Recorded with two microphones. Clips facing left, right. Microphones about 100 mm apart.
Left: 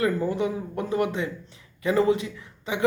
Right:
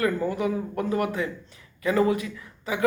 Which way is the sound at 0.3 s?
25° left (ahead or behind).